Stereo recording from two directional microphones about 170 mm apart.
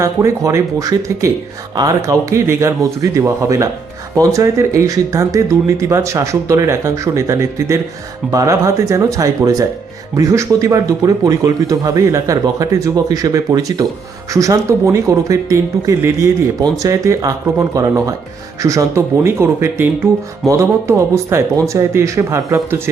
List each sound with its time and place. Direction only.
0.0 s speech: 15° right (ahead or behind)